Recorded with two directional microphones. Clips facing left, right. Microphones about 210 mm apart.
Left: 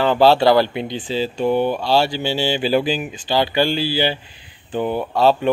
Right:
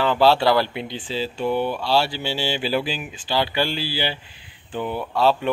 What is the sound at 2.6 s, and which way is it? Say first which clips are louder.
Mantra: left 6 dB; 40° left (ahead or behind).